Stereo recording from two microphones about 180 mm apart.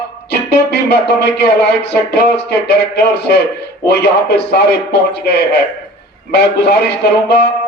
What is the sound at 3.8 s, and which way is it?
Speech, 65° left (ahead or behind).